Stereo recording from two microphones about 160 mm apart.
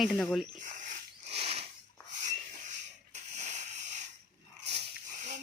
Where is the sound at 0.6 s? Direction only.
50° right (ahead or behind).